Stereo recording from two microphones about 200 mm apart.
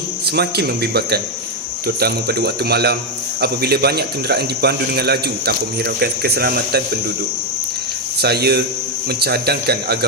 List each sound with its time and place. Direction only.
0.3 s speech: 55° right (ahead or behind)
8.2 s speech: 55° right (ahead or behind)